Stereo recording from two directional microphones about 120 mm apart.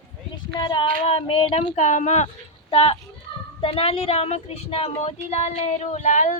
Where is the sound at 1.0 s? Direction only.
50° left (ahead or behind); by 2.3 s 75° left (ahead or behind).